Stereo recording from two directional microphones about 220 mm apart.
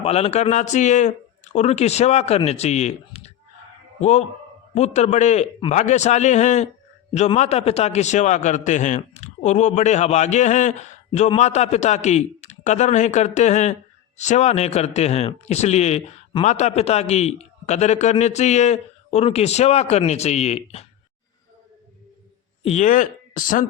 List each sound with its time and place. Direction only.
0.0 s a man's voice: 30° left (ahead or behind)
22.7 s speech: 35° left (ahead or behind)